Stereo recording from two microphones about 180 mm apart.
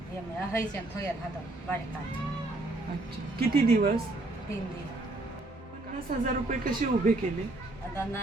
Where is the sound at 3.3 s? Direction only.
55° right (ahead or behind).